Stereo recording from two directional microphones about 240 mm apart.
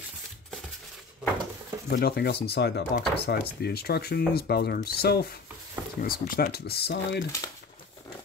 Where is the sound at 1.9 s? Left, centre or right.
Left.